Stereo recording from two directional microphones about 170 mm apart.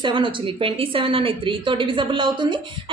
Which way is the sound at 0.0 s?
30° right (ahead or behind).